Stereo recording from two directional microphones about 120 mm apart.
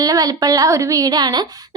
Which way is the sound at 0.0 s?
30° right (ahead or behind).